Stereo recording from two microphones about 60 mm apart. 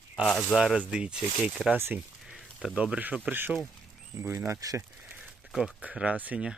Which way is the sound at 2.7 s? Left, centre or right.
Right.